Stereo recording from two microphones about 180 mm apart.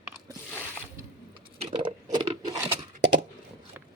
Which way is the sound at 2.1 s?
25° right (ahead or behind).